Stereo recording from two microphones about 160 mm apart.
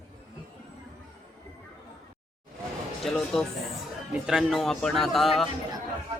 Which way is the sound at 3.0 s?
Centre (ahead or behind).